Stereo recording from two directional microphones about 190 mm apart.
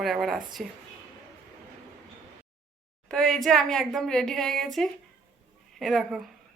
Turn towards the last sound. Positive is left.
turn(degrees=0)  # may be behind; listen again after turning